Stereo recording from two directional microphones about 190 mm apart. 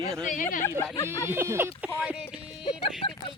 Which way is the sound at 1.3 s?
10° right (ahead or behind).